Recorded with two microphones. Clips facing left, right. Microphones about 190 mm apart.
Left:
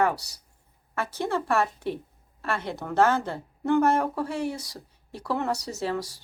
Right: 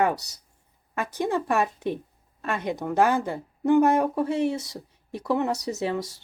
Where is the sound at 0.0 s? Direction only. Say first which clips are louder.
Right 1 dB; 20° right (ahead or behind).